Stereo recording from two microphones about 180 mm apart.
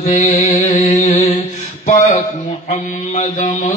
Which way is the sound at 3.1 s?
40° left (ahead or behind).